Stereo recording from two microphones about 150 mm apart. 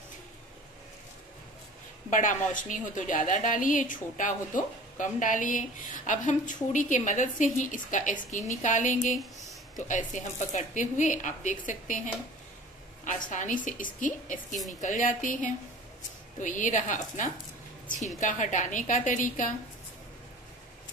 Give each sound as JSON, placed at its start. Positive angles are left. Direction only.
{"t": 2.0, "sound": "a woman's voice", "side_deg": 60}
{"t": 9.1, "sound": "speech", "side_deg": 0}
{"t": 9.8, "sound": "a woman's voice", "side_deg": 55}
{"t": 13.0, "sound": "a woman's voice", "side_deg": 55}